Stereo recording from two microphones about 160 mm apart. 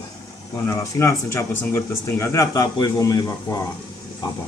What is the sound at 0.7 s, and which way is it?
Speech, 20° left (ahead or behind).